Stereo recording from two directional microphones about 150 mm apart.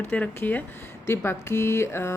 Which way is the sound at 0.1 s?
10° left (ahead or behind).